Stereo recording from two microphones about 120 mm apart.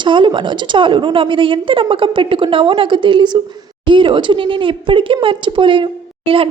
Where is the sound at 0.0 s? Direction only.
40° right (ahead or behind).